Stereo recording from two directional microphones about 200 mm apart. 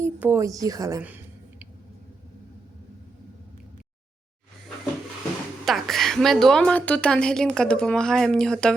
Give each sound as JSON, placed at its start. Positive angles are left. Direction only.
{"t": 0.0, "sound": "a woman's voice", "side_deg": -10}
{"t": 5.6, "sound": "a woman's voice", "side_deg": 0}